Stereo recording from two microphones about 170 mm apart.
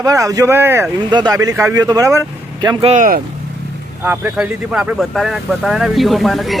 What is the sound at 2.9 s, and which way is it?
Speech, 50° right (ahead or behind).